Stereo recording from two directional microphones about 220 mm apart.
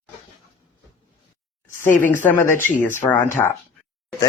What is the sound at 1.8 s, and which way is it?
Speech, 35° left (ahead or behind).